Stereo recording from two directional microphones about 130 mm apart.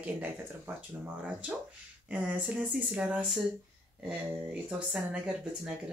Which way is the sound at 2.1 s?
10° right (ahead or behind).